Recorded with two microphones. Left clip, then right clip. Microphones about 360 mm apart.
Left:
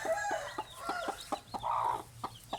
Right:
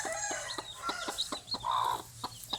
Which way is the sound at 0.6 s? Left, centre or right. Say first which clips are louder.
Even; centre.